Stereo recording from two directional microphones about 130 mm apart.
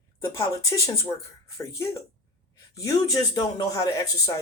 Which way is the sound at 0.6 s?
25° left (ahead or behind).